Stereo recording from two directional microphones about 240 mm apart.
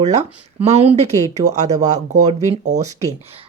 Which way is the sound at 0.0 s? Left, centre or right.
Right.